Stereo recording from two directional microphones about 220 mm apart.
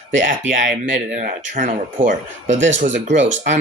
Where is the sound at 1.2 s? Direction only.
35° right (ahead or behind).